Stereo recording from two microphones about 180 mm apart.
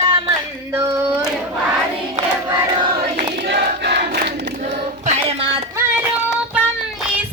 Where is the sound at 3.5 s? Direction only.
65° right (ahead or behind).